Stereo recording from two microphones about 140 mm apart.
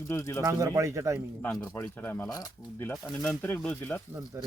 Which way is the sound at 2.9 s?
5° left (ahead or behind).